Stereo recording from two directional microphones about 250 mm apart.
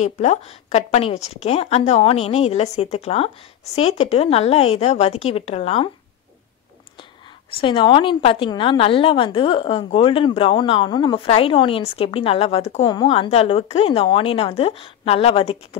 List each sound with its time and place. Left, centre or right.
0.0 s a woman's voice: left
7.5 s a woman's voice: centre